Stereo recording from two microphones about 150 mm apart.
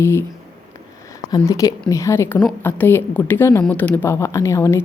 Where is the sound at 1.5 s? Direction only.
20° left (ahead or behind).